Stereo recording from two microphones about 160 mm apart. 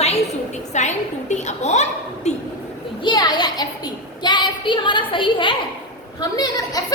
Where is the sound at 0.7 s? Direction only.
45° left (ahead or behind).